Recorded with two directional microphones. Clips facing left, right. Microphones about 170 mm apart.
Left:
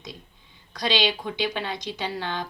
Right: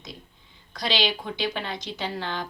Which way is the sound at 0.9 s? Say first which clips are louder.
Left 2 dB; 20° left (ahead or behind).